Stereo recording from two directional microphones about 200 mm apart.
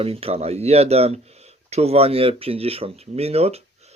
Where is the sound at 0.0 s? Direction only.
30° right (ahead or behind).